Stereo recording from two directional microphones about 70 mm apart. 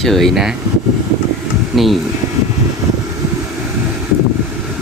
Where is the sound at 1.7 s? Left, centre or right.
Centre.